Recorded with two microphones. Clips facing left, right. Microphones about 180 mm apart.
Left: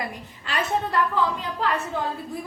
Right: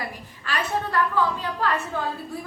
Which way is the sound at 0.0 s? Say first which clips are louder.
Left 1 dB; 20° left (ahead or behind).